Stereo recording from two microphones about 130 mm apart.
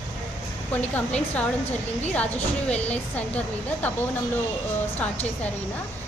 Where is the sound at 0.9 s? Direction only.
10° left (ahead or behind).